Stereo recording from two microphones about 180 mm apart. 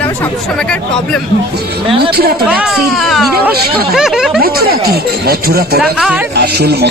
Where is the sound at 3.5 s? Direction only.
60° right (ahead or behind).